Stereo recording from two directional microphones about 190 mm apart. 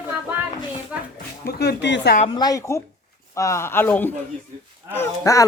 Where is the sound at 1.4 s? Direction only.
60° left (ahead or behind).